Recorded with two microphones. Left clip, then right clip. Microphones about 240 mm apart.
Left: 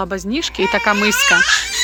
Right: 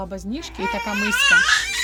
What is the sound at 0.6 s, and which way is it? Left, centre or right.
Speech, left.